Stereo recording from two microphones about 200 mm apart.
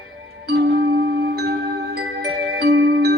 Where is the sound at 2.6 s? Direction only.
50° right (ahead or behind).